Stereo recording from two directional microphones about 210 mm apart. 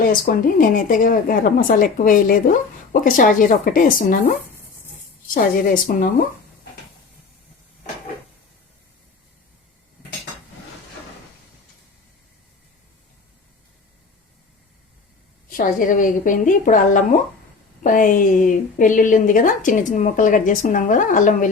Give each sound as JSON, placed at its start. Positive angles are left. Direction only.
{"t": 0.1, "sound": "a woman's voice", "side_deg": 40}
{"t": 15.4, "sound": "a woman's voice", "side_deg": 40}